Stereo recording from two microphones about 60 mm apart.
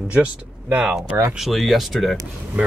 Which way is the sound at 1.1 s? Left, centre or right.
Right.